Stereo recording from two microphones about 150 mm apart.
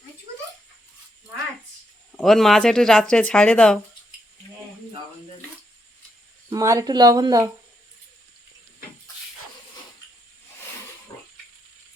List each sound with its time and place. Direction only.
2.1 s speech: centre (ahead or behind)
6.5 s speech: 20° right (ahead or behind)